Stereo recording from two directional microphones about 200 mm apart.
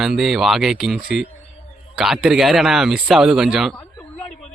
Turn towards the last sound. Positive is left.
turn(degrees=0)  # may be behind; listen again after turning